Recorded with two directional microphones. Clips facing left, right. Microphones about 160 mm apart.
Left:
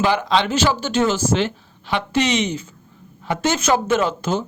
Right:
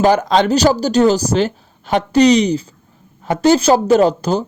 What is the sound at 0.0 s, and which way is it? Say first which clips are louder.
Speech: right 6 dB; 45° right (ahead or behind).